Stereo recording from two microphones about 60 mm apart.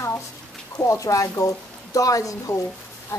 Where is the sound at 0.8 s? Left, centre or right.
Left.